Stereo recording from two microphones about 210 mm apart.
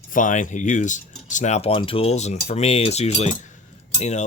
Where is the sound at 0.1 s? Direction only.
40° left (ahead or behind).